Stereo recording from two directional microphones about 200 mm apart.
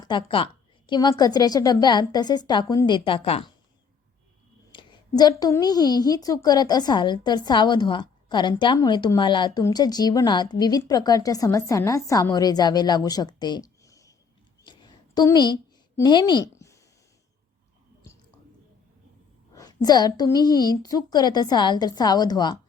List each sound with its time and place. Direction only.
0.0 s a woman's voice: 25° left (ahead or behind)
4.7 s a woman's voice: 20° left (ahead or behind)
14.6 s a sound: 20° left (ahead or behind)
16.0 s a woman's voice: 20° left (ahead or behind)
19.5 s a woman's voice: 20° left (ahead or behind)